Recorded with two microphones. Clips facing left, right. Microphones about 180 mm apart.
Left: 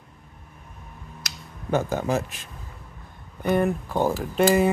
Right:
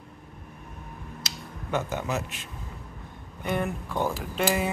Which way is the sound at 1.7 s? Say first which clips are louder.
Left 5 dB; 35° left (ahead or behind).